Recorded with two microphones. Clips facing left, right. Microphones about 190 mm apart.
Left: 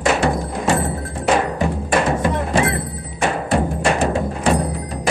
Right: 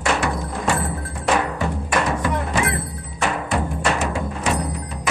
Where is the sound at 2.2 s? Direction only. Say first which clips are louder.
Left 4 dB; 25° left (ahead or behind).